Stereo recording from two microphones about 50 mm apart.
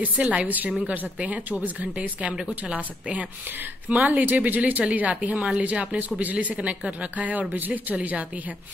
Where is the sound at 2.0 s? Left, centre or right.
Right.